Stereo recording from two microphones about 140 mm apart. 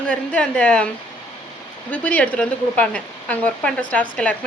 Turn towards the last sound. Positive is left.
turn(degrees=10)  # may be behind; listen again after turning